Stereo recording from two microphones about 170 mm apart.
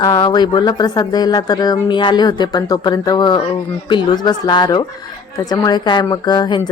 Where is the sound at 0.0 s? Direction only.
25° left (ahead or behind).